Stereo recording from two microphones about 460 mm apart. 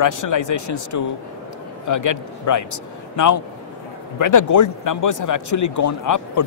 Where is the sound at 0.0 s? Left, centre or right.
Left.